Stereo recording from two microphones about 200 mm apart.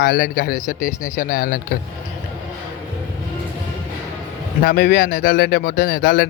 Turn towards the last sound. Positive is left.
turn(degrees=55)  # may be behind; listen again after turning